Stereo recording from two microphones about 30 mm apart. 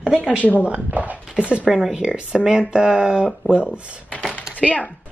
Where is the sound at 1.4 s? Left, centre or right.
Right.